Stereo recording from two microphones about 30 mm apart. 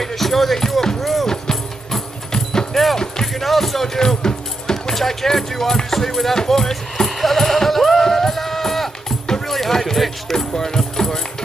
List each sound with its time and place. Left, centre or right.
0.0 s music: centre
0.6 s a sound: centre
1.2 s music: centre
2.7 s music: centre
3.4 s keys jangling: centre
4.2 s music: left
4.9 s speech: centre
6.3 s sheep: centre
9.5 s music: centre
10.3 s speech: centre